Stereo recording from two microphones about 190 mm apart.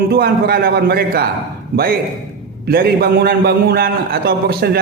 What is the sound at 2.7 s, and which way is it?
A man's voice, 55° right (ahead or behind).